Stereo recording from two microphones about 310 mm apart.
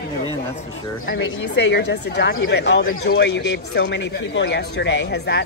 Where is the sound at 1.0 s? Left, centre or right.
Left.